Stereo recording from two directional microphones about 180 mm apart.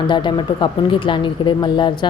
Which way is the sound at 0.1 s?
25° left (ahead or behind).